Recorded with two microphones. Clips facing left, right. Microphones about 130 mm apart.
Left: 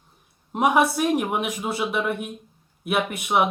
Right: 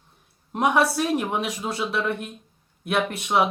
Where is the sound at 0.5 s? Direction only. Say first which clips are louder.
Left 1 dB; 10° left (ahead or behind).